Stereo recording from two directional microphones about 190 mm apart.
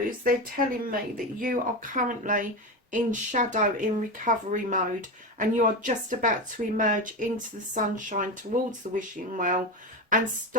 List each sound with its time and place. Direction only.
0.3 s speech: 50° right (ahead or behind)